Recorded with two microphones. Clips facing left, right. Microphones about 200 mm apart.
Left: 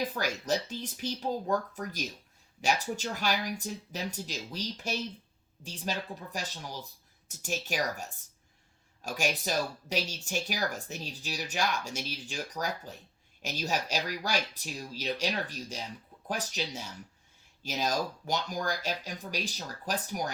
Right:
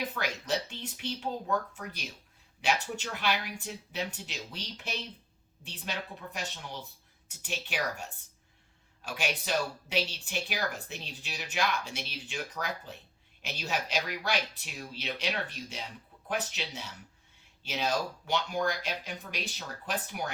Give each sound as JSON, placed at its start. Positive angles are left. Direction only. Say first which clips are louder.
{"t": 0.1, "sound": "speech", "louder": "left 2 dB", "side_deg": 40}